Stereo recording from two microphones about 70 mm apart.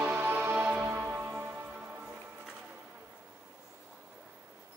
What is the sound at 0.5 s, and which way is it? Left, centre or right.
Music, centre.